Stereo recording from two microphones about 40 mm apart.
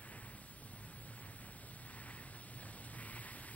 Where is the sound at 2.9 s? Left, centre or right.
Left.